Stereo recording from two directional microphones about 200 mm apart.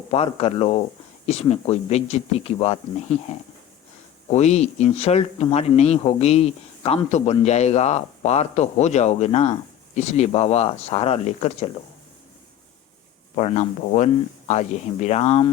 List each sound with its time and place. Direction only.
0.1 s speech: 30° left (ahead or behind)
13.3 s speech: 35° left (ahead or behind)